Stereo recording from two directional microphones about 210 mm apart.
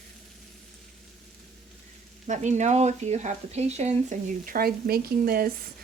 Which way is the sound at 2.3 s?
35° right (ahead or behind).